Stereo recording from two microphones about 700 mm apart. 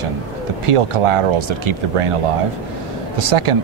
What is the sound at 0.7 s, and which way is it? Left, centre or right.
Speech, right.